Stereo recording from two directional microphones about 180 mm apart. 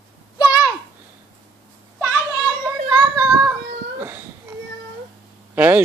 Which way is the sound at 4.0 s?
10° right (ahead or behind).